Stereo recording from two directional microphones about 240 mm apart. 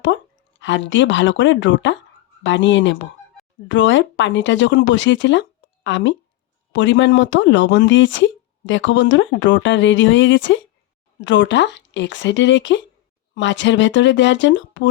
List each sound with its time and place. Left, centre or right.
0.6 s speech: left